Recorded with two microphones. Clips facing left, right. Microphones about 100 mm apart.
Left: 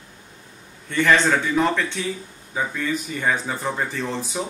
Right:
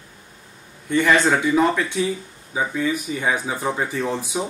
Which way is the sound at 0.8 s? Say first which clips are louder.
Right 1 dB; 10° right (ahead or behind).